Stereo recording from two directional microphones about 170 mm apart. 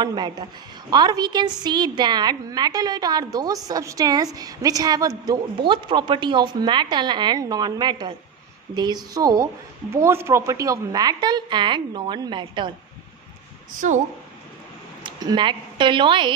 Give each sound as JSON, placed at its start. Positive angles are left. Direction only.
{"t": 0.0, "sound": "a woman's voice", "side_deg": -25}
{"t": 13.7, "sound": "a woman's voice", "side_deg": -50}
{"t": 15.0, "sound": "a woman's voice", "side_deg": -25}